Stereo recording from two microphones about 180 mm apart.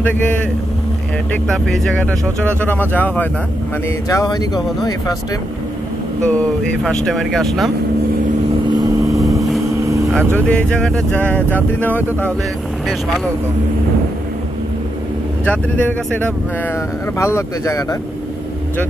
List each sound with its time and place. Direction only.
1.5 s speech: centre (ahead or behind)
4.1 s speech: 20° left (ahead or behind)
6.2 s speech: 5° left (ahead or behind)
8.6 s vehicle: 20° right (ahead or behind)
10.1 s speech: 5° left (ahead or behind)
15.4 s speech: 5° left (ahead or behind)